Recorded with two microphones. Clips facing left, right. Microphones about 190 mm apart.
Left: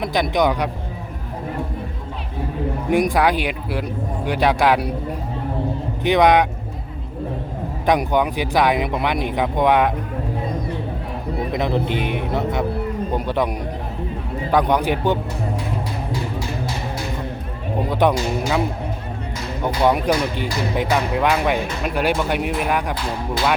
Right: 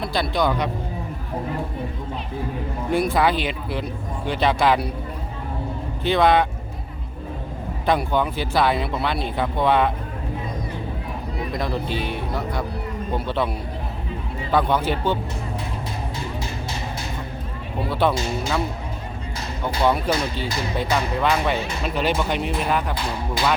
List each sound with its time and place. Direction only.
0.0 s speech: 15° left (ahead or behind)
2.9 s speech: 15° left (ahead or behind)
6.0 s speech: 15° left (ahead or behind)
7.9 s speech: 15° left (ahead or behind)
11.5 s speech: 20° left (ahead or behind)
14.5 s speech: 15° left (ahead or behind)
18.0 s speech: 15° left (ahead or behind)
19.6 s speech: 15° left (ahead or behind)